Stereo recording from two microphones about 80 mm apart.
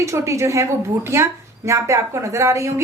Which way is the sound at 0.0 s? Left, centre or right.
Right.